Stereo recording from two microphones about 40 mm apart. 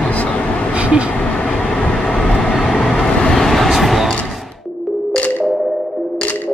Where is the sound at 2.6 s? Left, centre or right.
Centre.